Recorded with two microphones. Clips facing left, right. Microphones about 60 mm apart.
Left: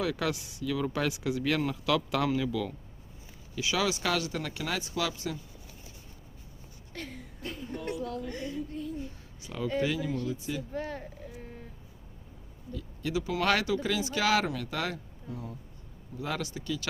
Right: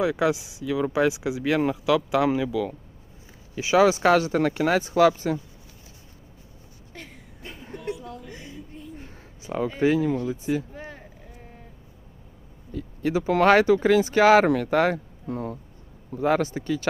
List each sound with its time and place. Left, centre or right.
0.0 s speech: centre
3.5 s speech: right
6.9 s a sound: centre
9.0 s a sound: right
9.8 s speech: right
10.8 s a sound: centre
12.7 s speech: right
15.3 s speech: right
16.1 s speech: right